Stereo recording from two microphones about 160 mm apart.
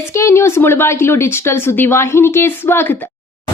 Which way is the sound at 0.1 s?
15° left (ahead or behind).